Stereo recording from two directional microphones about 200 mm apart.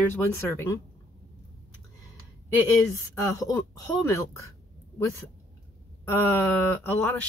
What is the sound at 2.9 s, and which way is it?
Speech, 15° left (ahead or behind).